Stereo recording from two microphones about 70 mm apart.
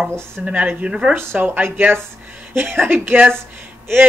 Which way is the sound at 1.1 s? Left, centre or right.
Right.